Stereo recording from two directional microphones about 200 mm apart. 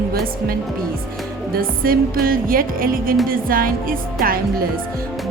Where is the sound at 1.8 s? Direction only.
45° right (ahead or behind).